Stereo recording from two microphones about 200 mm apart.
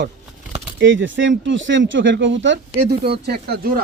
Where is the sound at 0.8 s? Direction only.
65° right (ahead or behind).